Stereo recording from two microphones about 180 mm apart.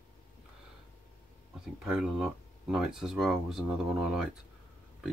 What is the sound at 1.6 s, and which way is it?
Speech, 5° right (ahead or behind).